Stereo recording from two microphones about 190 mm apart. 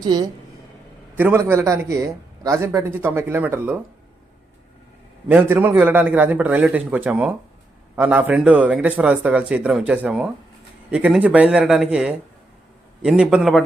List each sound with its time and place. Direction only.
0.0 s a woman's voice: 20° right (ahead or behind)
1.1 s a man's voice: 10° right (ahead or behind)
5.3 s a man's voice: 10° right (ahead or behind)